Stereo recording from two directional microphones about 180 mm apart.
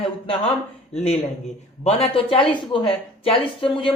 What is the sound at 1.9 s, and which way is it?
Speech, 30° left (ahead or behind).